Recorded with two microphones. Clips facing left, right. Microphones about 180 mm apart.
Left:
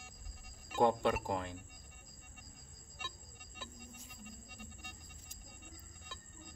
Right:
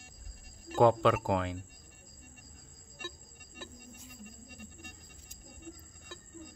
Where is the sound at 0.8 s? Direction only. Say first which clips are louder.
Right 6 dB; 90° right.